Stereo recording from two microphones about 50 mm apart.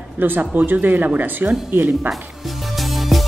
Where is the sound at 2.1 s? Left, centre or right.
Centre.